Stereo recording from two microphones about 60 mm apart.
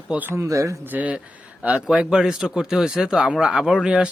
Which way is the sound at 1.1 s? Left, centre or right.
Centre.